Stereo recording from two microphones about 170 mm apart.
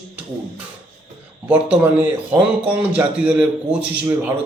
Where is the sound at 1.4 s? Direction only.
10° right (ahead or behind).